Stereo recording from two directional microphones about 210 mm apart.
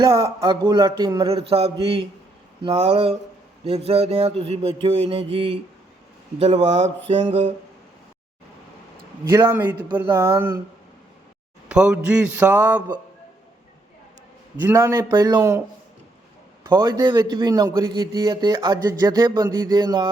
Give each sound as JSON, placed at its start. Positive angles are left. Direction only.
{"t": 0.0, "sound": "a man's voice", "side_deg": -15}
{"t": 9.3, "sound": "a man's voice", "side_deg": -10}
{"t": 11.7, "sound": "a man's voice", "side_deg": -5}
{"t": 14.6, "sound": "a man's voice", "side_deg": -15}
{"t": 16.6, "sound": "a man's voice", "side_deg": -20}